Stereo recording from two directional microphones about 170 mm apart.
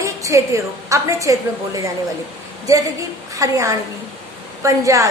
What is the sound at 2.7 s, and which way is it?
A woman's voice, 20° right (ahead or behind).